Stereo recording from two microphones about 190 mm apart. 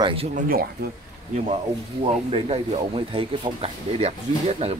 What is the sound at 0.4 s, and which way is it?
Speech, 50° right (ahead or behind).